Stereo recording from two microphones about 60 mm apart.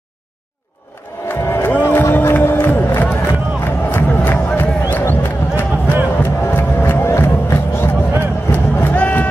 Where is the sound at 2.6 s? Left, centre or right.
Left.